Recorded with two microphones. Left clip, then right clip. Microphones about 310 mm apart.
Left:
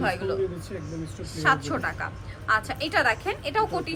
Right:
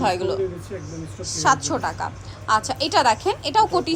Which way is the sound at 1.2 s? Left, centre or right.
Centre.